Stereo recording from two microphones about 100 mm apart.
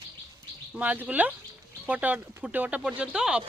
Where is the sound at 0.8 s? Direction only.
15° right (ahead or behind).